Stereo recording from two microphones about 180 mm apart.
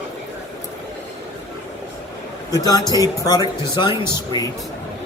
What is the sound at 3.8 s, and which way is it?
Speech, 15° right (ahead or behind).